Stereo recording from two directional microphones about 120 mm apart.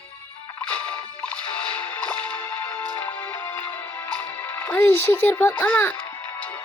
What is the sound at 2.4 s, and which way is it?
Music, 15° left (ahead or behind).